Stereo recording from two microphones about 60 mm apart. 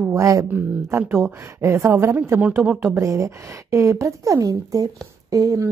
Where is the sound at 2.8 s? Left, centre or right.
Right.